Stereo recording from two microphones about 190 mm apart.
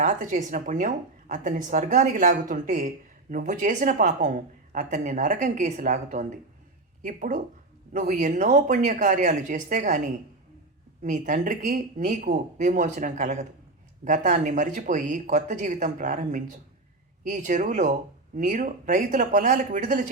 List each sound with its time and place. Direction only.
0.0 s speech: 40° right (ahead or behind)
11.0 s speech: 45° right (ahead or behind)